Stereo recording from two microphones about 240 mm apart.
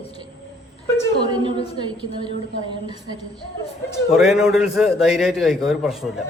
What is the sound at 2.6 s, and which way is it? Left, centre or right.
Speech, centre.